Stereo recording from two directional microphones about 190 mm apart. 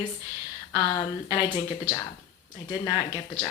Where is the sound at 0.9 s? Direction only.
25° left (ahead or behind).